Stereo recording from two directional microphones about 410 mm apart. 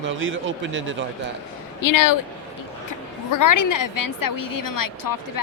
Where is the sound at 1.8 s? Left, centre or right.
Left.